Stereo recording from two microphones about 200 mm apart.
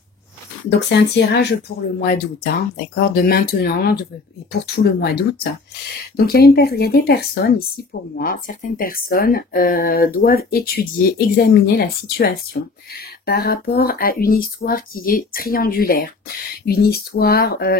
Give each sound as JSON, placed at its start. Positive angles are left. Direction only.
{"t": 0.7, "sound": "speech", "side_deg": 60}